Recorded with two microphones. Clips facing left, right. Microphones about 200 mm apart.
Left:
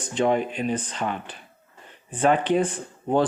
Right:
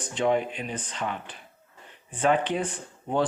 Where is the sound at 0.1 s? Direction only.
40° left (ahead or behind).